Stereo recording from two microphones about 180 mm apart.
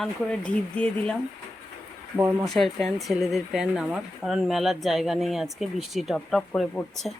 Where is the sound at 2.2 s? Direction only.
15° right (ahead or behind).